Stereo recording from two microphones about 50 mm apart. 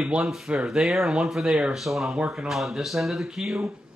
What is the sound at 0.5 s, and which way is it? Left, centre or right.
Speech, centre.